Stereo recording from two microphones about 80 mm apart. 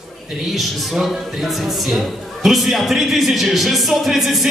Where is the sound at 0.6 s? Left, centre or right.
Centre.